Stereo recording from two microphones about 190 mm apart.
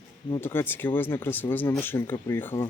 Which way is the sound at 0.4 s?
10° left (ahead or behind).